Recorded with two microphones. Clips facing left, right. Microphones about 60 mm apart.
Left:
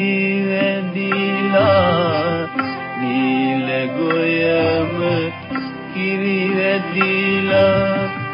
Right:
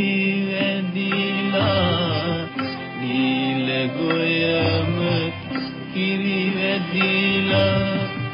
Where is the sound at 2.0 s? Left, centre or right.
Left.